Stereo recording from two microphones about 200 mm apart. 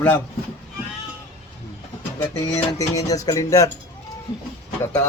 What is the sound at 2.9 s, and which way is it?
Speech, 15° left (ahead or behind).